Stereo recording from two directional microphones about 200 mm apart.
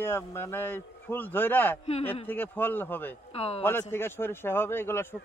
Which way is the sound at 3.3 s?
30° left (ahead or behind).